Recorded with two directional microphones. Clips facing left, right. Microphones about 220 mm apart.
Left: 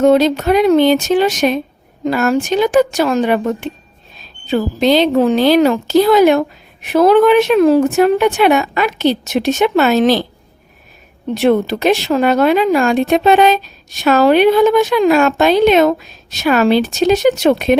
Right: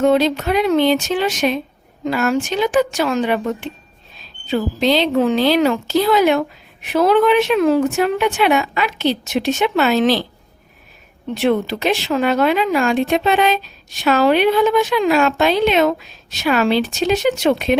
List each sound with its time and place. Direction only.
0.0 s speech: 45° left (ahead or behind)
11.3 s speech: 45° left (ahead or behind)